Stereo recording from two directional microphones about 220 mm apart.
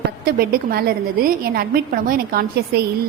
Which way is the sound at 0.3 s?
45° right (ahead or behind).